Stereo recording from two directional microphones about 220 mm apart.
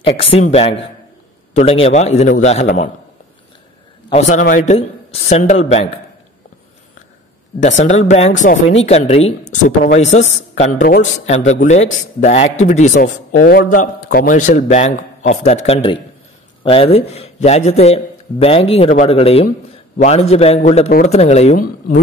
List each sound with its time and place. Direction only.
0.0 s a man's voice: 25° left (ahead or behind)
4.1 s a man's voice: 30° left (ahead or behind)
7.6 s a man's voice: 35° left (ahead or behind)